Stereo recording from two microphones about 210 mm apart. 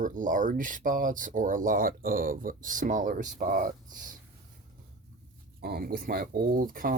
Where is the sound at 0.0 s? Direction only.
40° right (ahead or behind).